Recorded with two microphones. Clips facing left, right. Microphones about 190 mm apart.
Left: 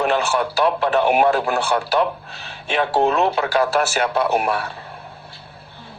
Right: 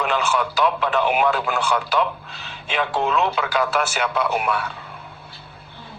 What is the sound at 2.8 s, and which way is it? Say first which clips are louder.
Speech: left 4 dB; 40° left (ahead or behind).